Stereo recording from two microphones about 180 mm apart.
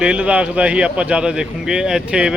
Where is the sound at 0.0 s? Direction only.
5° right (ahead or behind).